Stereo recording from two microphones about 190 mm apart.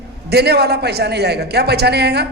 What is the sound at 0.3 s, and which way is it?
A man's voice, 60° right (ahead or behind).